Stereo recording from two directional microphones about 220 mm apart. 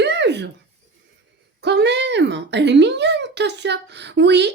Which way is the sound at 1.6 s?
50° right (ahead or behind).